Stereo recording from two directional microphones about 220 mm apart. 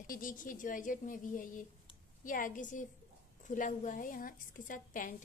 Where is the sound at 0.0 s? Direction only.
40° left (ahead or behind).